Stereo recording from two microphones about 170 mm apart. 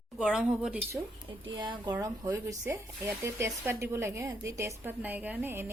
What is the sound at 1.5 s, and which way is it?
A woman's voice, 25° right (ahead or behind).